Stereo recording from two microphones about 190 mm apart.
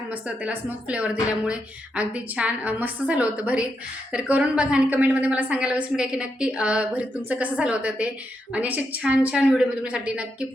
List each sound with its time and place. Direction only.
0.1 s a woman's voice: 5° right (ahead or behind)